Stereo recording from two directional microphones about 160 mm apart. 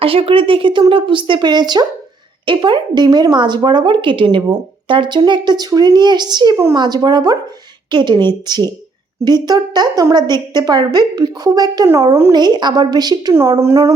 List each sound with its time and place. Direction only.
0.0 s a woman's voice: 35° right (ahead or behind); by 13.9 s 15° right (ahead or behind)